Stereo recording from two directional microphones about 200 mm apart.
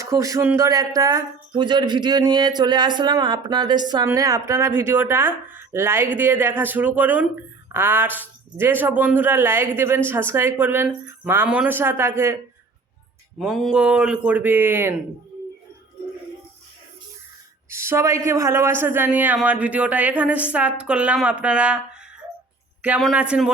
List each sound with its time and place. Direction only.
0.0 s speech: 15° right (ahead or behind)
13.4 s speech: 5° right (ahead or behind)
17.7 s speech: 15° right (ahead or behind)
22.8 s speech: 5° right (ahead or behind)